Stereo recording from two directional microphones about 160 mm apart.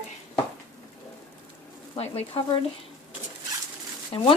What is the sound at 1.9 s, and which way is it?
Speech, 40° left (ahead or behind).